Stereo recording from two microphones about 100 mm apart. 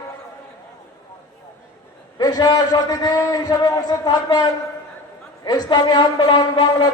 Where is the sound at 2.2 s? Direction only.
40° left (ahead or behind).